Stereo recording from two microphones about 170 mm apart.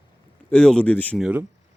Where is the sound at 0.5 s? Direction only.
5° left (ahead or behind).